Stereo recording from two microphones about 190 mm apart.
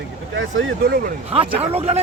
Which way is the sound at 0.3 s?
80° right.